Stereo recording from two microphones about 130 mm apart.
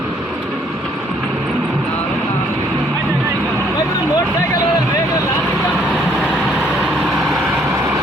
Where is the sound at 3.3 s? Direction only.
15° right (ahead or behind).